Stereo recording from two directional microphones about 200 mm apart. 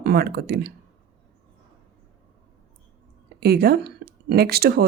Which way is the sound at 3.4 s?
50° right (ahead or behind).